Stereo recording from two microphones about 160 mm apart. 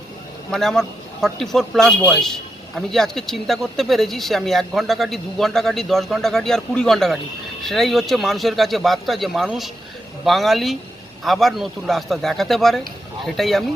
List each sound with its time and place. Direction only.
0.5 s a man's voice: 5° left (ahead or behind)